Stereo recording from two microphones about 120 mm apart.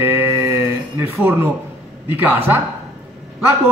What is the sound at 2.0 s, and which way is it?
Speech, 15° right (ahead or behind).